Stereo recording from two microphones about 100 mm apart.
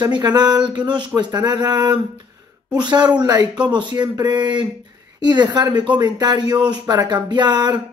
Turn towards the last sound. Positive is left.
turn(degrees=-45)  # may be behind; listen again after turning